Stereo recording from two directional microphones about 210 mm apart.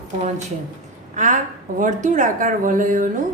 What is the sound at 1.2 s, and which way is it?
A woman's voice, 35° right (ahead or behind).